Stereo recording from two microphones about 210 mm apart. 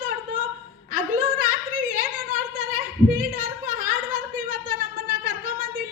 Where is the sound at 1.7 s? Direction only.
40° right (ahead or behind).